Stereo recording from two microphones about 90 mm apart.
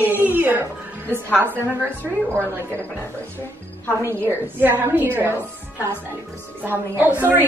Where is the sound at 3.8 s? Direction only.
30° left (ahead or behind).